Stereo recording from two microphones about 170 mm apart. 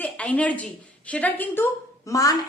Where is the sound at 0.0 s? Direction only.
10° left (ahead or behind).